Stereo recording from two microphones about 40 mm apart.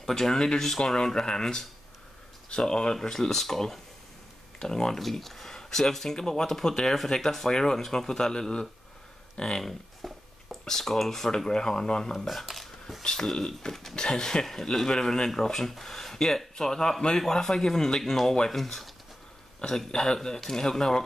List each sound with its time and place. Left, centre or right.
0.0 s speech: centre
10.0 s a sound: centre
10.6 s speech: centre
12.2 s speech: centre
13.0 s speech: centre
19.9 s speech: centre
20.2 s speech: centre